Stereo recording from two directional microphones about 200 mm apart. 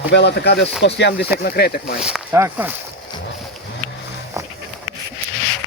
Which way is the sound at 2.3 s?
10° right (ahead or behind).